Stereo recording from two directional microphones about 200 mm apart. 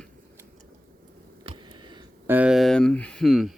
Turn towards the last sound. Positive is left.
turn(degrees=0)  # may be behind; listen again after turning